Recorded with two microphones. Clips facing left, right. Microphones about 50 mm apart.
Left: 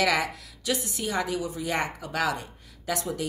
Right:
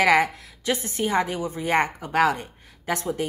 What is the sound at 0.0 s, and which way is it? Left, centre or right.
A woman's voice, right.